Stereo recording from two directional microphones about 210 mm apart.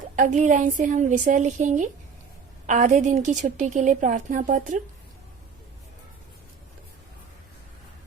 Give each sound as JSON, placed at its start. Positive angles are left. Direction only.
{"t": 0.2, "sound": "a woman's voice", "side_deg": -35}